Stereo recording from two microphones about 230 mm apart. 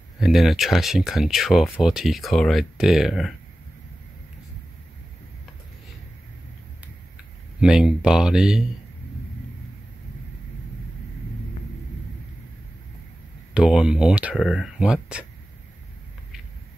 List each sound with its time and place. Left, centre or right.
0.2 s speech: centre
7.6 s speech: centre
13.5 s speech: centre